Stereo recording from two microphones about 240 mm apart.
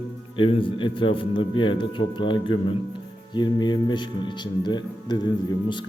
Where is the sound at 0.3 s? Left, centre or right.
Left.